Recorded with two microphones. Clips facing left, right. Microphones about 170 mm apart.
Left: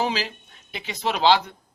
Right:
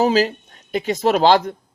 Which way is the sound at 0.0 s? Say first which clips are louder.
Right 10 dB; 45° right (ahead or behind).